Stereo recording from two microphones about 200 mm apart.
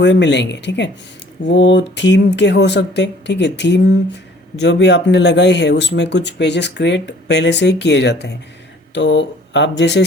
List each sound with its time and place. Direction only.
0.0 s speech: 60° left (ahead or behind)